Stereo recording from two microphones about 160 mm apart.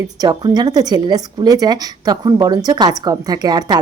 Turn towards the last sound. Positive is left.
turn(degrees=-25)  # may be behind; listen again after turning